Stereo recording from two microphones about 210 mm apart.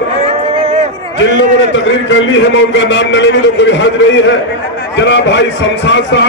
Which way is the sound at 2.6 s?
60° left (ahead or behind).